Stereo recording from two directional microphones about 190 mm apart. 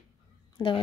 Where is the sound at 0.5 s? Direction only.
25° left (ahead or behind).